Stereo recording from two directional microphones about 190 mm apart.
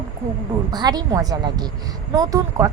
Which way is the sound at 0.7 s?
20° right (ahead or behind).